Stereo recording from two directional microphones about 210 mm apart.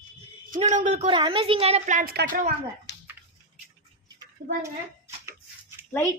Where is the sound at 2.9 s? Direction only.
55° left (ahead or behind).